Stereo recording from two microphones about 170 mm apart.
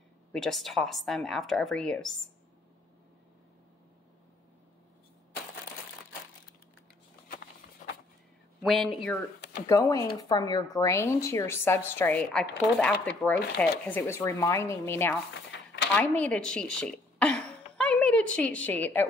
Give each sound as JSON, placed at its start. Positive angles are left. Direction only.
{"t": 0.3, "sound": "a woman's voice", "side_deg": 0}
{"t": 8.6, "sound": "a woman's voice", "side_deg": 0}
{"t": 9.7, "sound": "a woman's voice", "side_deg": 20}